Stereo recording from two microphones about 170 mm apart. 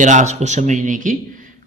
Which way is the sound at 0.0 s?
45° right (ahead or behind).